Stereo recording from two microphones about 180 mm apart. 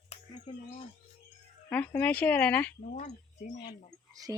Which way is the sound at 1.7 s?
10° left (ahead or behind).